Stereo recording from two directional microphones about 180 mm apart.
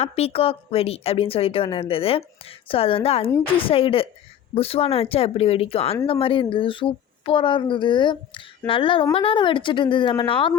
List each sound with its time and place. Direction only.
0.0 s a woman's voice: 35° left (ahead or behind)